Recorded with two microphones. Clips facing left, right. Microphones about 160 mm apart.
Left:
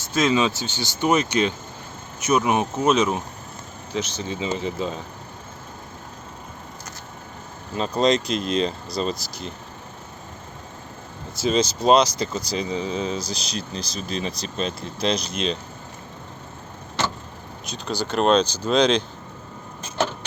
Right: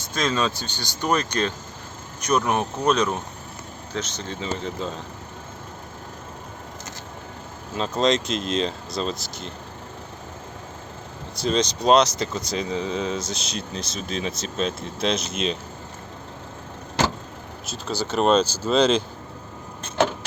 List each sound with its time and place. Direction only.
0.1 s speech: 5° left (ahead or behind)
7.8 s speech: centre (ahead or behind)
11.3 s speech: 5° left (ahead or behind)
17.7 s speech: 5° right (ahead or behind)